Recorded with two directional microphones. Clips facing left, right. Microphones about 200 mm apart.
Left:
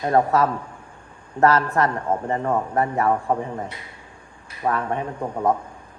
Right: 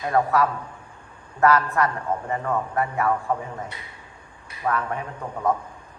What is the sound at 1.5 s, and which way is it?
A man's voice, 20° left (ahead or behind).